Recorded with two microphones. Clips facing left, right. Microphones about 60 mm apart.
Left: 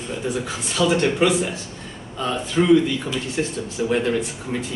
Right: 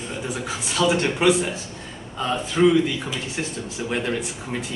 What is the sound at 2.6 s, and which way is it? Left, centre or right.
Speech, centre.